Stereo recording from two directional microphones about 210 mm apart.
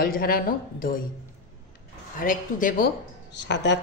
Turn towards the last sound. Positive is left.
turn(degrees=55)  # may be behind; listen again after turning